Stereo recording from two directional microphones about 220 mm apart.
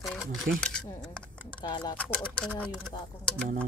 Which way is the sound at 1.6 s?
20° left (ahead or behind).